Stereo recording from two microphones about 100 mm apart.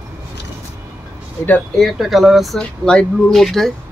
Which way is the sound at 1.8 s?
Centre (ahead or behind).